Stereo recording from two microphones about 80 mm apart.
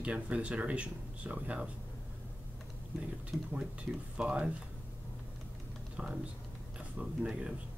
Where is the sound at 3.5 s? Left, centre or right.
Centre.